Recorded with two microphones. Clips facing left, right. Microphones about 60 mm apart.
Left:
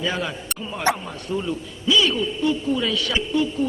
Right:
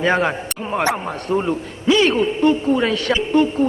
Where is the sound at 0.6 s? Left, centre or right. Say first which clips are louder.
Right 3 dB; right.